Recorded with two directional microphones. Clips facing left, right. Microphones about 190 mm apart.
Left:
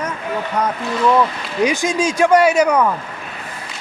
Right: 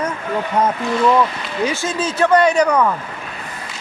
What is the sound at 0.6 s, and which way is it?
Speech, 25° right (ahead or behind).